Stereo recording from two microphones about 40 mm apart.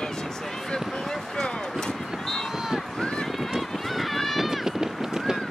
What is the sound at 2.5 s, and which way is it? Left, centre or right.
Run, centre.